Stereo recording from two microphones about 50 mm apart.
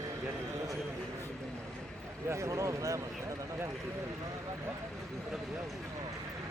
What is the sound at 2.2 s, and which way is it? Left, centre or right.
Speech, right.